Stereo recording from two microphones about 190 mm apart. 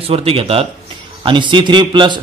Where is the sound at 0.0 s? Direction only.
30° right (ahead or behind).